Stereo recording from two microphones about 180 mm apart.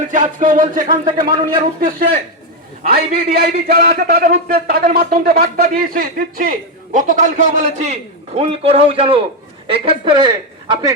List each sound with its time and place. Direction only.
0.1 s a man's voice: 45° right (ahead or behind)
0.9 s speech: 25° right (ahead or behind)
1.5 s a man's voice: 50° right (ahead or behind); by 10.3 s 25° right (ahead or behind)